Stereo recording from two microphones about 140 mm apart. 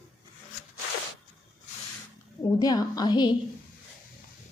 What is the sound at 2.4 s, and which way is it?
Speech, 30° left (ahead or behind).